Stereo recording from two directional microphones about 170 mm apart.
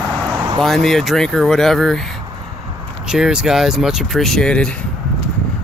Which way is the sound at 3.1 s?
5° right (ahead or behind).